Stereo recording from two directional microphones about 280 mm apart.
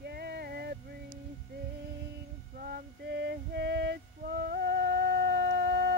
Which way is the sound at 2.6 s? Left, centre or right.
Right.